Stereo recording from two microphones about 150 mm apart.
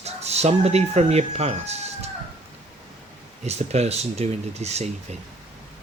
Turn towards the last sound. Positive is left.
turn(degrees=-45)  # may be behind; listen again after turning